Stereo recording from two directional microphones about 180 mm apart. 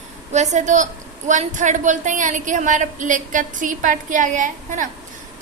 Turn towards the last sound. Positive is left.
turn(degrees=-45)  # may be behind; listen again after turning